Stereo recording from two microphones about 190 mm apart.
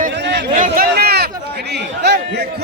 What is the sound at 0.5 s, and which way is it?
Speech, 45° right (ahead or behind).